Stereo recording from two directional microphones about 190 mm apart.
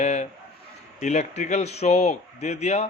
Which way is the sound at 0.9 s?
40° left (ahead or behind).